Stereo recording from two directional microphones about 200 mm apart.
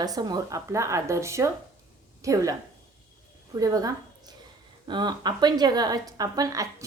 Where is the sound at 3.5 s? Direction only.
20° right (ahead or behind).